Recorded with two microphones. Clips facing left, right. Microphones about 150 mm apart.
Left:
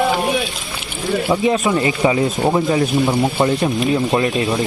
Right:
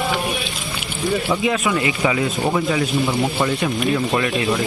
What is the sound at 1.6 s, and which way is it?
Speech, 35° left (ahead or behind).